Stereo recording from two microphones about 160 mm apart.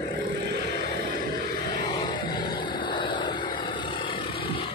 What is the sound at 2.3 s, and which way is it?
Vehicle, 30° left (ahead or behind).